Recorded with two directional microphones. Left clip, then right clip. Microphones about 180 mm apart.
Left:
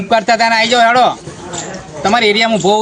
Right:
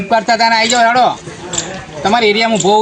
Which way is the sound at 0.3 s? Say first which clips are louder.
Right 1 dB; 20° left (ahead or behind).